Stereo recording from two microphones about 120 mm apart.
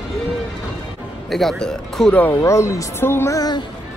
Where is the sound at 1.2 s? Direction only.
Centre (ahead or behind).